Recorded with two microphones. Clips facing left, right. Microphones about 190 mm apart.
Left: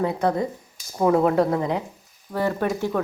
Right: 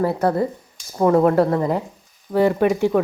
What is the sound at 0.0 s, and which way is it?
A woman's voice, 5° right (ahead or behind).